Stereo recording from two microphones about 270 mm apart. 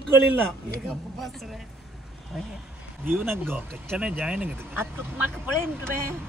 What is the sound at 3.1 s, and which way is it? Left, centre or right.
A woman's voice, centre.